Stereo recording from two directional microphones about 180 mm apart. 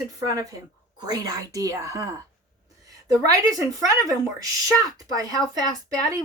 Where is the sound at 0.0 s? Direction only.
20° right (ahead or behind).